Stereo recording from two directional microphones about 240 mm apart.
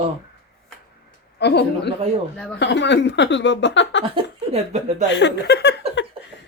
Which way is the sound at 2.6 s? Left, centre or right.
Left.